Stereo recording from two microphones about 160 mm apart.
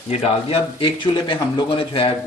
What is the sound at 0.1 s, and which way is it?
A man's voice, 40° left (ahead or behind).